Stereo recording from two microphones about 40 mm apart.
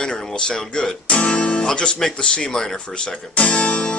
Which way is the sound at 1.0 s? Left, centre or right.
Left.